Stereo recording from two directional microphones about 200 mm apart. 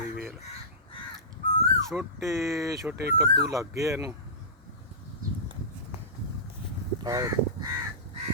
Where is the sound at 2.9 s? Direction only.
55° right (ahead or behind).